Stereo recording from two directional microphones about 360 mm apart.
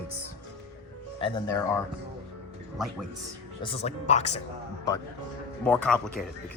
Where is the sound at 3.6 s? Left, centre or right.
Centre.